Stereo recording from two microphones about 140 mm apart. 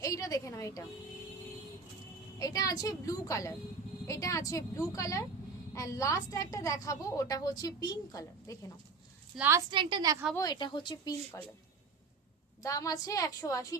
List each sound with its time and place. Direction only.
0.0 s a woman's voice: 25° left (ahead or behind)
2.4 s a woman's voice: 25° left (ahead or behind)
9.4 s a woman's voice: 20° right (ahead or behind)
9.6 s a woman's voice: 35° right (ahead or behind)
10.3 s a woman's voice: 30° left (ahead or behind)
12.6 s a woman's voice: 25° left (ahead or behind)